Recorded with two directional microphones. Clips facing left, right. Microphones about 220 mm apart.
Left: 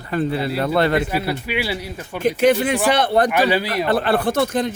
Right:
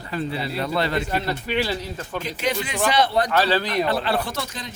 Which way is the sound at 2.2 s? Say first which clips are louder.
Left 12 dB; 55° left (ahead or behind).